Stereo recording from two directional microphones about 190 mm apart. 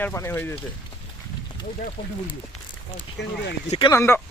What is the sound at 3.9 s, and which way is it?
Speech, 10° left (ahead or behind).